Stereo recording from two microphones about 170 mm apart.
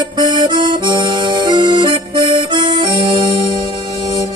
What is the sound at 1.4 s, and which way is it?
Music, 25° right (ahead or behind).